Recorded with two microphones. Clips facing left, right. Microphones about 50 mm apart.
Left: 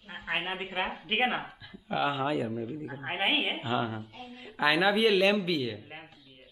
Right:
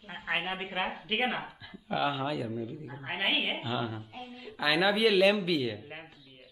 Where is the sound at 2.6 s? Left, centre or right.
Left.